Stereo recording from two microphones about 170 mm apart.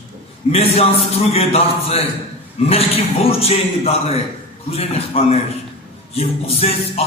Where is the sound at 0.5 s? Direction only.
35° left (ahead or behind).